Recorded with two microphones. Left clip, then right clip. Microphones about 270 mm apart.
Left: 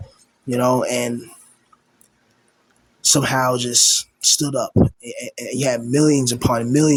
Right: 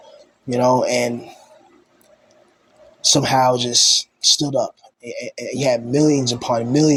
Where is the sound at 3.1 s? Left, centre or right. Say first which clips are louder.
Right 3 dB; centre.